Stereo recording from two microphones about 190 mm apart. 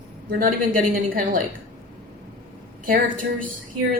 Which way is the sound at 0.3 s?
50° right (ahead or behind).